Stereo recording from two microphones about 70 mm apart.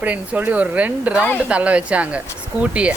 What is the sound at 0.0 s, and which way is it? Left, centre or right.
Speech, right.